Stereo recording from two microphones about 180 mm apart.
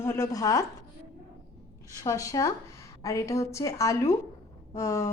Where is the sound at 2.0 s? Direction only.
20° left (ahead or behind).